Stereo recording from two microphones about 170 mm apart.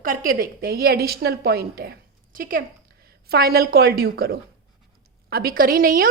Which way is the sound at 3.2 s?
65° right (ahead or behind).